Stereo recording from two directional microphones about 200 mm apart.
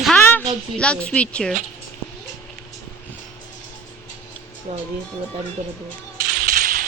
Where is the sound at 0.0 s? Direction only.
5° left (ahead or behind).